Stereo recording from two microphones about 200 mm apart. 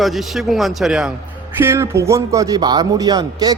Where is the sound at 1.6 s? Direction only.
10° right (ahead or behind).